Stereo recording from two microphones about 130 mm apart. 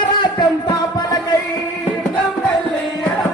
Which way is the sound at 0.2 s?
35° left (ahead or behind).